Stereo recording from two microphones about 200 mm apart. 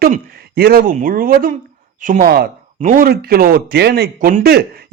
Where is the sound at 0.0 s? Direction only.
50° right (ahead or behind).